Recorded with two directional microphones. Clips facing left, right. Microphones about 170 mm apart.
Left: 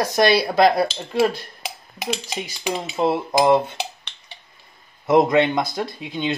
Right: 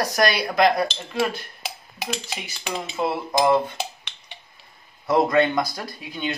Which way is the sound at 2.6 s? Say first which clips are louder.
Left 4 dB; 25° left (ahead or behind).